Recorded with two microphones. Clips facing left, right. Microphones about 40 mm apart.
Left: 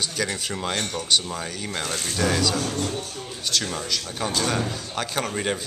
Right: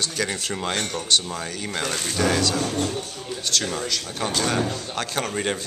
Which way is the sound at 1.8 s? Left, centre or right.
Right.